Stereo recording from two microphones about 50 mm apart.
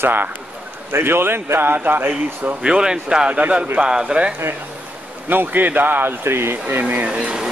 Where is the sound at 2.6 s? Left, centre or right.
Centre.